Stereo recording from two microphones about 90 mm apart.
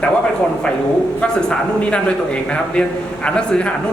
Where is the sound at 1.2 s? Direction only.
10° left (ahead or behind).